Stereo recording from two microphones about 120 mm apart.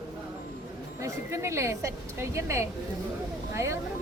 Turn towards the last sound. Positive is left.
turn(degrees=-25)  # may be behind; listen again after turning